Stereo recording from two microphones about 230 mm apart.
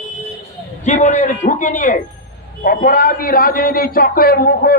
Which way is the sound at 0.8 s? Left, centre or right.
Left.